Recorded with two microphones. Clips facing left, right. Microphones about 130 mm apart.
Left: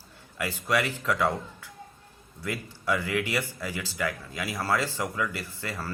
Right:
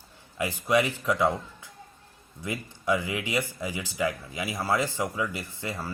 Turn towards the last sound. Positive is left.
turn(degrees=-15)  # may be behind; listen again after turning